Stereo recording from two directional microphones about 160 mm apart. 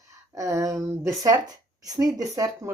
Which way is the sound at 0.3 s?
20° right (ahead or behind).